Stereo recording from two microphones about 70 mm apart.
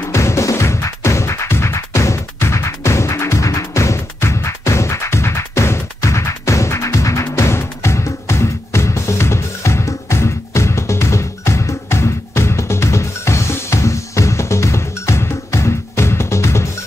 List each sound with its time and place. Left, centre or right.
0.1 s music: left